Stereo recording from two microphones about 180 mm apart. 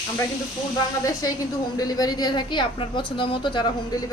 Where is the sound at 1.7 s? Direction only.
20° left (ahead or behind).